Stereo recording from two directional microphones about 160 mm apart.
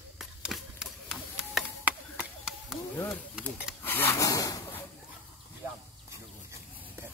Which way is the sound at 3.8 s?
15° left (ahead or behind).